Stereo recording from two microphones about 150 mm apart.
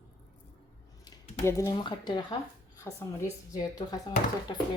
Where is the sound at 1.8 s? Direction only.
30° left (ahead or behind).